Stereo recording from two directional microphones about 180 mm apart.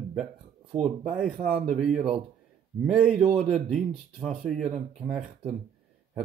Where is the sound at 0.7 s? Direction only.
35° right (ahead or behind).